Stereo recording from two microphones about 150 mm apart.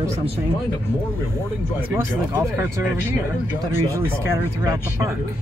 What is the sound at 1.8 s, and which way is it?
Speech, 15° right (ahead or behind).